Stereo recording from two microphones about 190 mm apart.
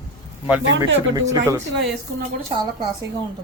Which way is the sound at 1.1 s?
15° right (ahead or behind).